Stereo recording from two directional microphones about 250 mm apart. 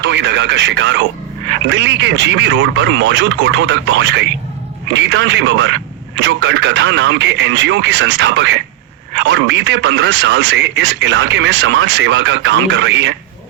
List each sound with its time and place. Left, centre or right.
0.0 s speech: right